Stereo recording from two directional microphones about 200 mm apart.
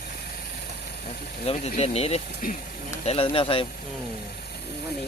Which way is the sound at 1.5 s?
30° left (ahead or behind).